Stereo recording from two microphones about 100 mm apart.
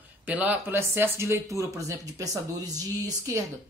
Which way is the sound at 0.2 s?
15° right (ahead or behind).